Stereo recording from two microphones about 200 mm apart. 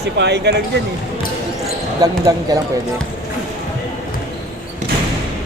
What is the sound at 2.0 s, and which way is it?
Speech, 20° right (ahead or behind).